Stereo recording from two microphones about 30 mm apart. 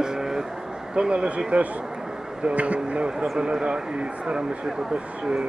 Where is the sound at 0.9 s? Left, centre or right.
Right.